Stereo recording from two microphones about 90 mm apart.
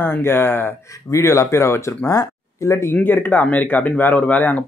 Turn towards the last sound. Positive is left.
turn(degrees=20)  # may be behind; listen again after turning